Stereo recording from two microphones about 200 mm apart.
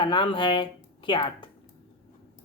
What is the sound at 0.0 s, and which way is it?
A woman's voice, 25° left (ahead or behind).